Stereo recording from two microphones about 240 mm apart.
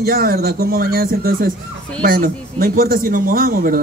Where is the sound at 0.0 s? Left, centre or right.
Right.